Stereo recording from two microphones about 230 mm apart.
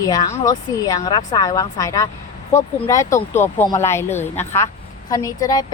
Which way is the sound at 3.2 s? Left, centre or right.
Centre.